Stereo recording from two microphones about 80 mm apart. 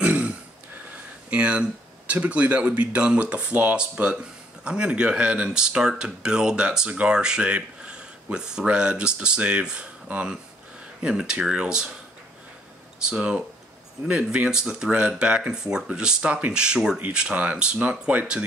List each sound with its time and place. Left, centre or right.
0.0 s a sound: centre
1.3 s speech: centre
13.1 s speech: centre